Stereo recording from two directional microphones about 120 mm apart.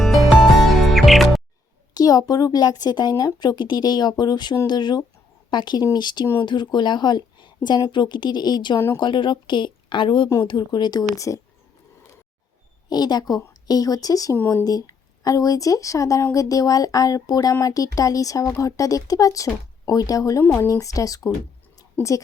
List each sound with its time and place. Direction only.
0.0 s music: centre (ahead or behind)
1.9 s a woman's voice: 30° left (ahead or behind)
12.9 s speech: 35° left (ahead or behind)
14.3 s speech: 15° left (ahead or behind)
14.6 s a woman's voice: 30° left (ahead or behind)
22.0 s speech: 15° left (ahead or behind)